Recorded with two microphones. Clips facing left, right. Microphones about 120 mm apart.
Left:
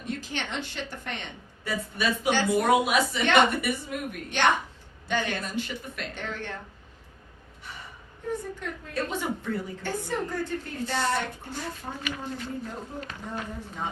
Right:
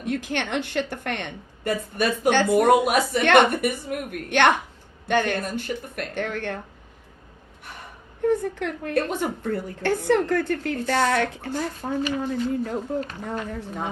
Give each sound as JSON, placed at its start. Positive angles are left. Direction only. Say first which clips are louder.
{"t": 0.0, "sound": "a woman's voice", "louder": "right 7 dB", "side_deg": -60}
{"t": 8.2, "sound": "a sound", "louder": "right 11 dB", "side_deg": -65}
{"t": 8.5, "sound": "a woman's voice", "louder": "right 8 dB", "side_deg": -70}
{"t": 9.8, "sound": "a woman's voice", "louder": "right 13 dB", "side_deg": -75}
{"t": 13.3, "sound": "a woman's voice", "louder": "right 6 dB", "side_deg": -55}